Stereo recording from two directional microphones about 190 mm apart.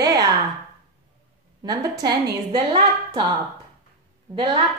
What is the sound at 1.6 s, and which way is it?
A woman's voice, 20° right (ahead or behind).